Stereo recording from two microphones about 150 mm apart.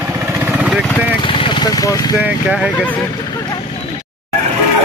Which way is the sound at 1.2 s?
35° left (ahead or behind).